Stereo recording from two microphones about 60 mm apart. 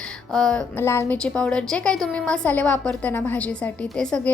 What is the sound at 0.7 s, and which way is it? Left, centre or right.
Speech, left.